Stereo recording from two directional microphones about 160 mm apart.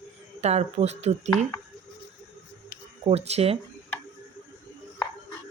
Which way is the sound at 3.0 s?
40° right (ahead or behind).